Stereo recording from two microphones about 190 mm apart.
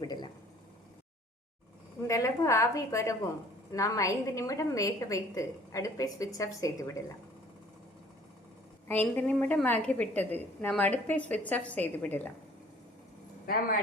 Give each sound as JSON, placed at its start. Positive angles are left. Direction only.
{"t": 0.0, "sound": "a sound", "side_deg": 20}
{"t": 2.0, "sound": "a woman's voice", "side_deg": 15}
{"t": 8.9, "sound": "a woman's voice", "side_deg": 10}